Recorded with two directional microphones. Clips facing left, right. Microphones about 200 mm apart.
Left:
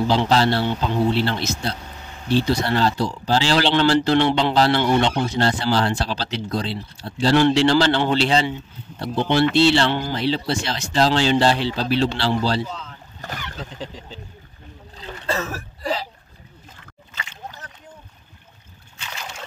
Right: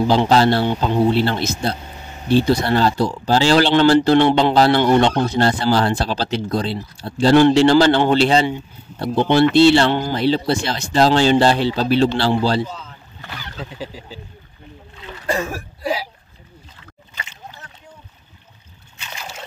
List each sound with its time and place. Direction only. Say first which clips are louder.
0.1 s speech: right 4 dB; 45° right (ahead or behind)
12.6 s speech: even; 5° right (ahead or behind)
15.2 s speech: right 3 dB; 15° right (ahead or behind)